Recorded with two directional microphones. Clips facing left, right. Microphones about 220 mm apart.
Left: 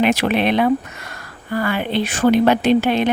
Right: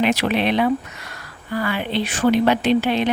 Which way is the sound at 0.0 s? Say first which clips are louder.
Left 2 dB; 50° left (ahead or behind).